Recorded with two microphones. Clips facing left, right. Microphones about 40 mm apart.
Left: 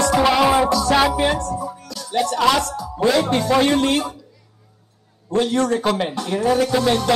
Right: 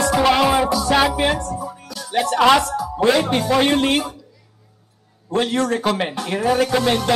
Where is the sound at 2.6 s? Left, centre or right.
Centre.